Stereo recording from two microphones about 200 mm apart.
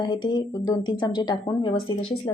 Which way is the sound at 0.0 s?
20° left (ahead or behind).